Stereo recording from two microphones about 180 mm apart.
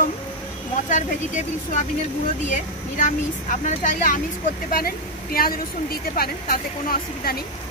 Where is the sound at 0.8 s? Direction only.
45° left (ahead or behind).